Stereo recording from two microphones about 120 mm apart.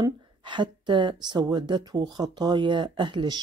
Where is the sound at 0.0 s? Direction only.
40° right (ahead or behind).